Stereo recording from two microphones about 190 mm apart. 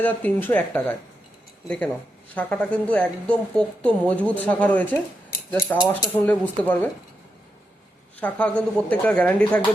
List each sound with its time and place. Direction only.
0.0 s a woman's voice: 10° left (ahead or behind)
6.1 s a woman's voice: 10° left (ahead or behind)
8.2 s a woman's voice: 5° left (ahead or behind)